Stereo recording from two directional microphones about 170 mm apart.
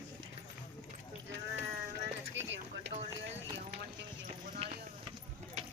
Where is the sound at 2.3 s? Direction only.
90° right.